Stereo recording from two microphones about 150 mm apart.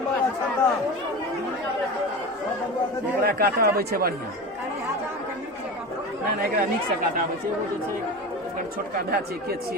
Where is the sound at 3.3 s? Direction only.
90° right.